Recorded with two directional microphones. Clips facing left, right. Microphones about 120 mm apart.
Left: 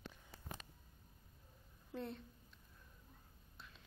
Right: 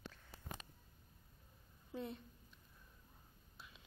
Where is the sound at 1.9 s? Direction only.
5° right (ahead or behind).